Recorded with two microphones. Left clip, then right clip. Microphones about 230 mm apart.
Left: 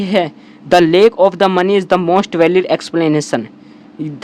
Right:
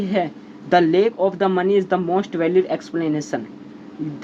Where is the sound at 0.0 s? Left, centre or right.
Left.